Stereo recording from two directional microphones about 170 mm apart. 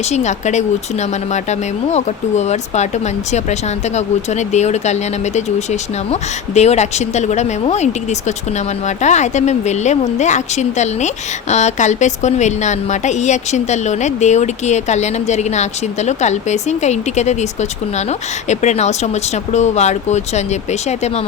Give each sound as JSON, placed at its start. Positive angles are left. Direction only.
{"t": 0.1, "sound": "speech", "side_deg": 45}